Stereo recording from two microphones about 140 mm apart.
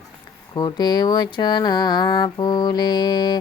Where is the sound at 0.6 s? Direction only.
30° left (ahead or behind).